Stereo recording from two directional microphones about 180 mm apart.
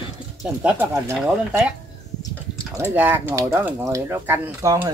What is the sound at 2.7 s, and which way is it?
Speech, 10° right (ahead or behind).